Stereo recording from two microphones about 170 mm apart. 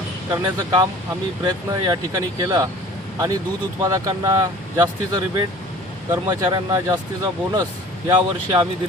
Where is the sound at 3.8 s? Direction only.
20° right (ahead or behind).